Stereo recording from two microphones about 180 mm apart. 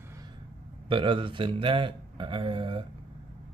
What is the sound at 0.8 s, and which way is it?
Speech, 30° right (ahead or behind).